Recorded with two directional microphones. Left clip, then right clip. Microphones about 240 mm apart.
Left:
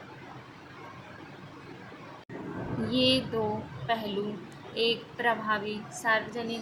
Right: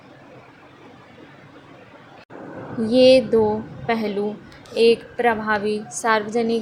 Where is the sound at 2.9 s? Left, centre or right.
Right.